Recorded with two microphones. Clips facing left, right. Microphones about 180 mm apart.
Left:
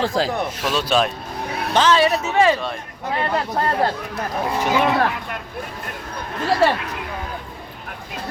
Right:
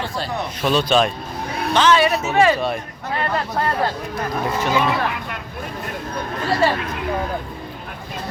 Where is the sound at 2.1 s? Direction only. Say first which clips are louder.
Right 1 dB; centre (ahead or behind).